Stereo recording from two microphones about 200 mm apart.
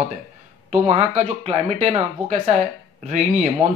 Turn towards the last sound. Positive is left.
turn(degrees=-35)  # may be behind; listen again after turning